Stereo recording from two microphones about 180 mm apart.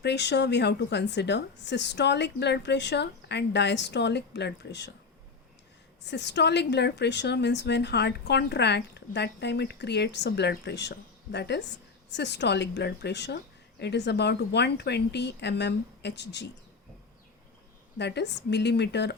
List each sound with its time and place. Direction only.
0.0 s a woman's voice: 70° left (ahead or behind)
6.1 s a woman's voice: 75° left (ahead or behind)
17.9 s a woman's voice: 70° left (ahead or behind)